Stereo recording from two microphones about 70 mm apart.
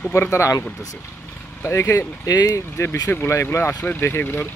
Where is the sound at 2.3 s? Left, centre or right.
Left.